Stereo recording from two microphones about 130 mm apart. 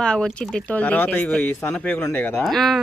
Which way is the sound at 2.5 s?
Centre (ahead or behind).